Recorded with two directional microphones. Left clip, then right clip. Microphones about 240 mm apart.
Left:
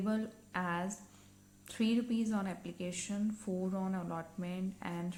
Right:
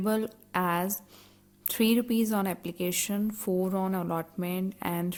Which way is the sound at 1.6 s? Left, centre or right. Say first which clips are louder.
Right 9 dB; right.